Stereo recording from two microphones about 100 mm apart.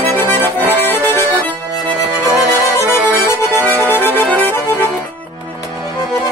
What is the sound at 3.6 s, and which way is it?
Music, 20° left (ahead or behind).